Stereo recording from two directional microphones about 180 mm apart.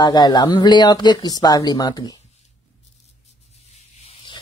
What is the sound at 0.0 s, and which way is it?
Speech, 20° left (ahead or behind).